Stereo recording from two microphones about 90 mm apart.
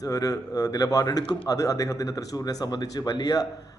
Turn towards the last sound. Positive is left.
turn(degrees=45)  # may be behind; listen again after turning